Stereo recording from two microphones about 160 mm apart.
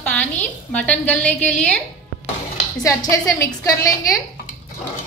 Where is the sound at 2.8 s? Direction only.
20° left (ahead or behind).